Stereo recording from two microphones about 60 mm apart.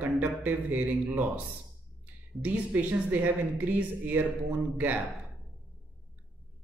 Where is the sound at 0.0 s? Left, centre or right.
Right.